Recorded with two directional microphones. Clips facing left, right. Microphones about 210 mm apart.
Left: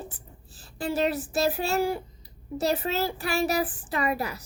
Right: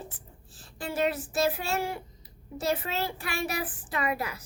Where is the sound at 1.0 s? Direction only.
35° left (ahead or behind).